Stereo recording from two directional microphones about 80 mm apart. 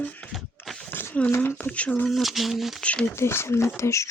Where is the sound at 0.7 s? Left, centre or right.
Centre.